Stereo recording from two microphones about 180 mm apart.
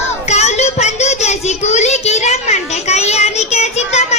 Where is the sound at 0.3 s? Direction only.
40° left (ahead or behind).